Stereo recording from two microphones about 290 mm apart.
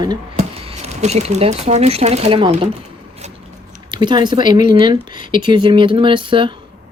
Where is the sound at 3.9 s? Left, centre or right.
Centre.